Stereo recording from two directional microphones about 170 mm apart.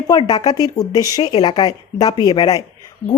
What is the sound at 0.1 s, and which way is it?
Speech, 25° left (ahead or behind).